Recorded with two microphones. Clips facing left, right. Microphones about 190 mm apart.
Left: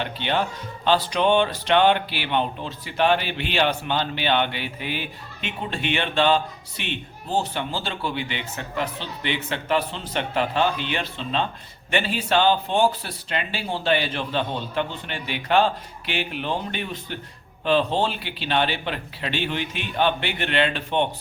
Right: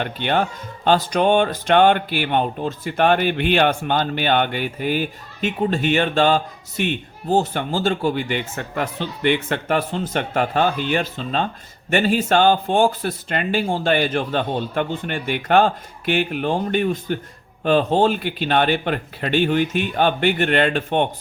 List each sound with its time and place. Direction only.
0.0 s speech: 50° right (ahead or behind)